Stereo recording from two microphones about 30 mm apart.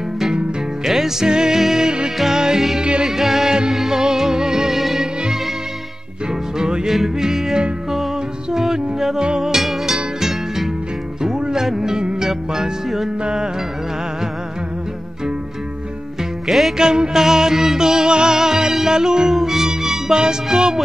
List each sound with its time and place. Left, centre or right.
0.8 s music: centre
1.2 s music: right
2.8 s music: right
3.1 s music: centre
6.6 s music: right
9.6 s music: centre
11.2 s music: right
12.0 s music: right
16.4 s music: centre
16.7 s music: right